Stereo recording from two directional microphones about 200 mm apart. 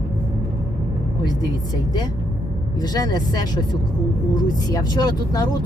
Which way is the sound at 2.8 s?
20° left (ahead or behind).